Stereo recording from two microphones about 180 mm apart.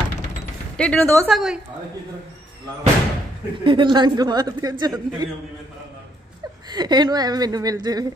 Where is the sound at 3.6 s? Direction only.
25° right (ahead or behind).